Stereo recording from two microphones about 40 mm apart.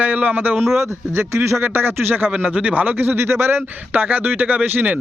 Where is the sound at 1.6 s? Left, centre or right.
Right.